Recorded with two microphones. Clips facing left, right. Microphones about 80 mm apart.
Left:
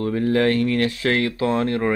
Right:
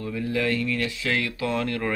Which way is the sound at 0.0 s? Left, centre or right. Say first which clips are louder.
Left 7 dB; left.